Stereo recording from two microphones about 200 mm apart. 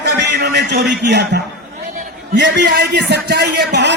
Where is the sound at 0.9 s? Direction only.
60° right (ahead or behind).